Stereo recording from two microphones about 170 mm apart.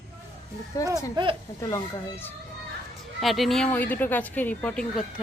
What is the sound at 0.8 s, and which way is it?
Speech, 20° right (ahead or behind).